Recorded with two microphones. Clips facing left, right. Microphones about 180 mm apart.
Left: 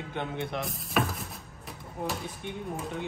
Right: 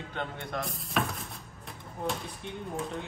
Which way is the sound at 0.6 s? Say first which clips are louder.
Left 1 dB; centre (ahead or behind).